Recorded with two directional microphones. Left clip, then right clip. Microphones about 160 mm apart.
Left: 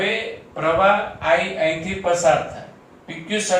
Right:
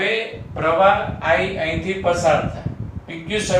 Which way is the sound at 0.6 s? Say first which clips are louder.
Right 1 dB; 25° right (ahead or behind).